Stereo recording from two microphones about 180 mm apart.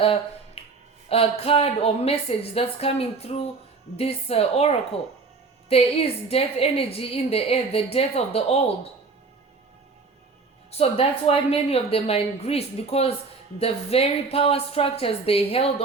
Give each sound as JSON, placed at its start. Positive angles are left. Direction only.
{"t": 0.0, "sound": "finger snapping", "side_deg": 30}
{"t": 1.1, "sound": "a woman's voice", "side_deg": 30}
{"t": 10.7, "sound": "a woman's voice", "side_deg": 35}